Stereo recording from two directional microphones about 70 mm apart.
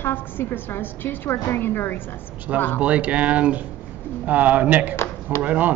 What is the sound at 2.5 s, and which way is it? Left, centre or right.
Speech, centre.